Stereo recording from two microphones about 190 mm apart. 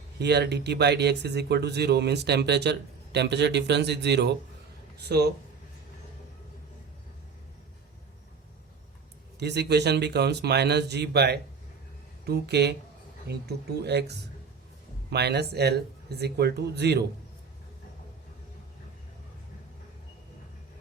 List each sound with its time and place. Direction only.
0.2 s speech: 60° right (ahead or behind)
9.4 s speech: 60° right (ahead or behind)